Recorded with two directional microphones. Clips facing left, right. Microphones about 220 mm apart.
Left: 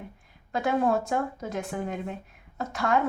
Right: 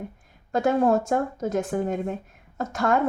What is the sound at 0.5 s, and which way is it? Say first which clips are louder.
Speech: right 4 dB; 45° right (ahead or behind).